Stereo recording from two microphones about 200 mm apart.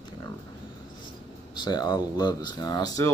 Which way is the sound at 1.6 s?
20° left (ahead or behind).